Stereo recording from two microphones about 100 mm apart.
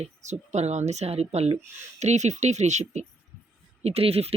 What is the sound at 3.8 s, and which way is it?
Speech, 85° right.